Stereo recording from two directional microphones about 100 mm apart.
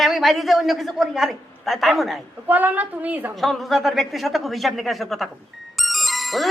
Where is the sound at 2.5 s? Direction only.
15° right (ahead or behind).